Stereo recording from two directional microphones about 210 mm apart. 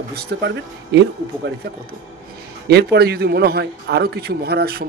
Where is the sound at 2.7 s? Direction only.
50° right (ahead or behind).